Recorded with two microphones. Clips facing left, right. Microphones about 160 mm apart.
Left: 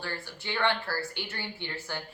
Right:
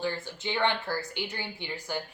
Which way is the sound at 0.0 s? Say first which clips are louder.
Right 6 dB; 15° right (ahead or behind).